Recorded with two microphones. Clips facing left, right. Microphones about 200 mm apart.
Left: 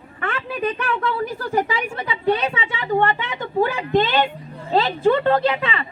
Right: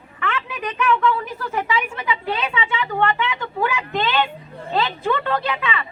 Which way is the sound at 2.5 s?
45° left (ahead or behind).